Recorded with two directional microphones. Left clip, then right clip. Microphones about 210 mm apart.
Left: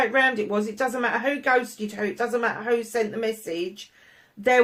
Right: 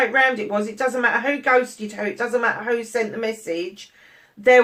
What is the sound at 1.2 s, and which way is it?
Speech, 35° left (ahead or behind).